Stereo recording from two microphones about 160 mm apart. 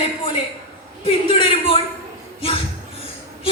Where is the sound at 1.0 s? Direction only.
35° left (ahead or behind).